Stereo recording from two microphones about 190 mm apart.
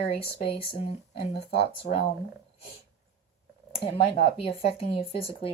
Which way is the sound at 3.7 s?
30° left (ahead or behind).